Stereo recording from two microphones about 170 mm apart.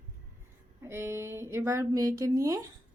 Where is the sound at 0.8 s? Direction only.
15° right (ahead or behind).